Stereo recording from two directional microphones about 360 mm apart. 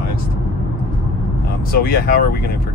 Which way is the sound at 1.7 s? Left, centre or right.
Left.